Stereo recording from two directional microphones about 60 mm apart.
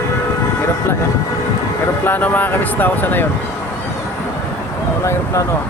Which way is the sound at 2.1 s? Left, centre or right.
Left.